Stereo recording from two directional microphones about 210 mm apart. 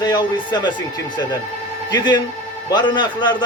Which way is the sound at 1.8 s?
20° left (ahead or behind).